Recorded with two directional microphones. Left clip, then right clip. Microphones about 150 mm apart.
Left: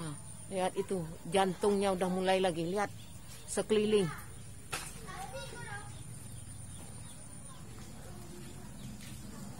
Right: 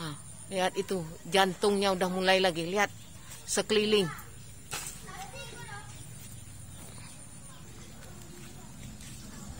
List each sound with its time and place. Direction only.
0.0 s a woman's voice: 15° right (ahead or behind)